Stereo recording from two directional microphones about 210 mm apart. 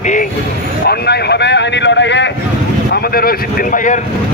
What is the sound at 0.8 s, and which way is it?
Speech, 50° left (ahead or behind).